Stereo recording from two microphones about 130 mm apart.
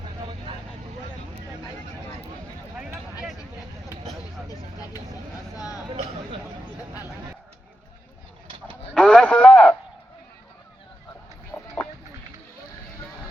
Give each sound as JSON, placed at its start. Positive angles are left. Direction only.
{"t": 0.0, "sound": "vehicle", "side_deg": -40}
{"t": 9.0, "sound": "radio", "side_deg": 10}
{"t": 11.5, "sound": "a sound", "side_deg": 10}